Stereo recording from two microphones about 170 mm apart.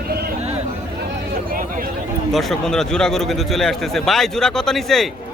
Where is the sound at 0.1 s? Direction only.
65° right (ahead or behind).